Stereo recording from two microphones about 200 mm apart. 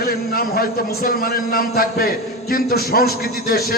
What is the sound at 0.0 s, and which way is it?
A man's voice, 45° left (ahead or behind).